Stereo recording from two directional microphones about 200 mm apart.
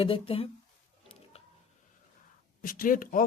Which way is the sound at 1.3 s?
30° left (ahead or behind).